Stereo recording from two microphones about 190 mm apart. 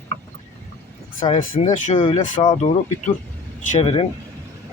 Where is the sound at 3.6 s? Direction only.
35° left (ahead or behind).